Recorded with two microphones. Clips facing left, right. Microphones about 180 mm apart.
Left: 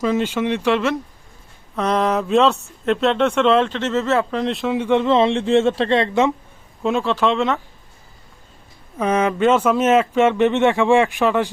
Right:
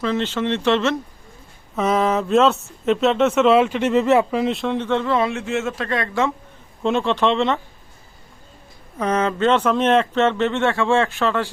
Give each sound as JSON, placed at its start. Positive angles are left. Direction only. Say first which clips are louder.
{"t": 0.0, "sound": "speech", "louder": "left 2 dB", "side_deg": 10}
{"t": 1.7, "sound": "speech", "louder": "even", "side_deg": -5}
{"t": 6.8, "sound": "speech", "louder": "even", "side_deg": 0}
{"t": 9.0, "sound": "speech", "louder": "left 2 dB", "side_deg": 10}